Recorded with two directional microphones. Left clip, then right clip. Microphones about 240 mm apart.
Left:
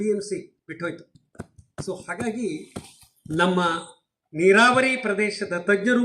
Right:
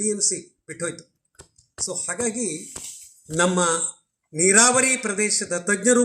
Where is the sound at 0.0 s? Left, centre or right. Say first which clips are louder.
Even; right.